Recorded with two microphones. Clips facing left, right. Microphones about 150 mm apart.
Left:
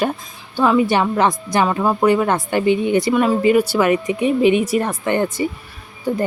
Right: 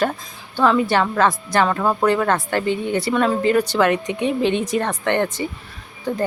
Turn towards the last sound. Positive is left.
turn(degrees=10)  # may be behind; listen again after turning